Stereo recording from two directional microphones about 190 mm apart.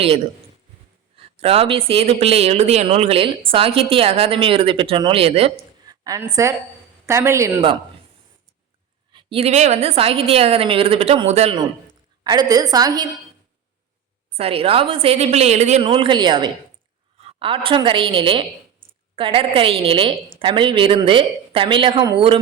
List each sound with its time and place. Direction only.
1.1 s speech: 30° right (ahead or behind)
5.8 s a sound: 20° right (ahead or behind)
7.0 s a man's voice: 15° right (ahead or behind)
9.1 s speech: 30° right (ahead or behind)
12.2 s a woman's voice: 20° right (ahead or behind)
14.3 s a woman's voice: 30° right (ahead or behind)